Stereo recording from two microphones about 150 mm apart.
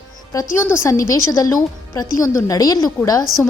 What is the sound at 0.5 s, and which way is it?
Speech, 15° left (ahead or behind).